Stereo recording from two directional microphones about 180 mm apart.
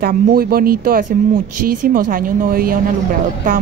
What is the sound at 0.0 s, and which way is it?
Speech, 55° right (ahead or behind).